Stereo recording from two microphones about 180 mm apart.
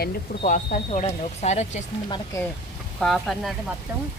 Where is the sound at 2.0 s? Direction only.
25° left (ahead or behind).